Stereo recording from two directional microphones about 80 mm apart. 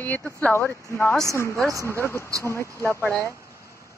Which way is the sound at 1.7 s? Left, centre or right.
Right.